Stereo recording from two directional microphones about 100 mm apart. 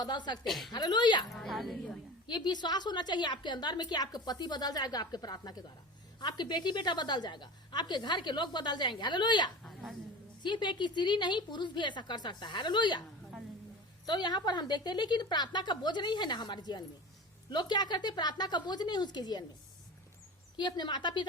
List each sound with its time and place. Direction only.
0.0 s a woman's voice: 45° left (ahead or behind)
0.4 s a woman's voice: centre (ahead or behind)
0.7 s a woman's voice: 45° left (ahead or behind)
1.3 s a woman's voice: centre (ahead or behind)
2.2 s a woman's voice: 45° left (ahead or behind)
14.1 s a woman's voice: 45° left (ahead or behind)
20.6 s a woman's voice: 50° left (ahead or behind)